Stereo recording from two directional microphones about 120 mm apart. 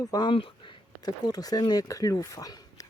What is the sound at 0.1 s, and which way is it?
Speech, 35° left (ahead or behind).